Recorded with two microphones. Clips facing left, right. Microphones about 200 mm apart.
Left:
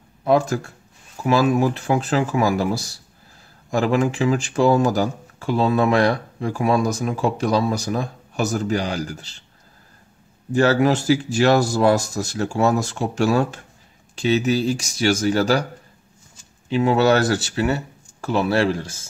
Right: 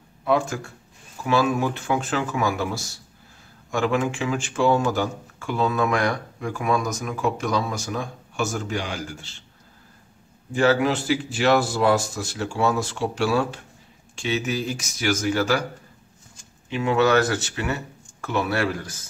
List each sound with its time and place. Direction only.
0.2 s speech: 40° left (ahead or behind)
10.5 s speech: 40° left (ahead or behind)
16.6 s speech: 35° left (ahead or behind)